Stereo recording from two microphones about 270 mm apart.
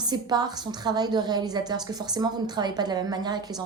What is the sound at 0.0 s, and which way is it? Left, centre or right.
A woman's voice, centre.